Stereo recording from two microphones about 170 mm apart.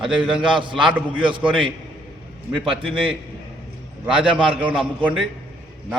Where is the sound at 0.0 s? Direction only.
5° right (ahead or behind).